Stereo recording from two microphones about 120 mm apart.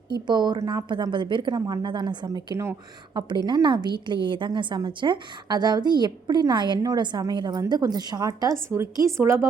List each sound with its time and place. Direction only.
0.1 s a woman's voice: 40° right (ahead or behind)
2.5 s speech: 25° right (ahead or behind)
3.4 s a woman's voice: 40° right (ahead or behind); by 9.5 s 20° right (ahead or behind)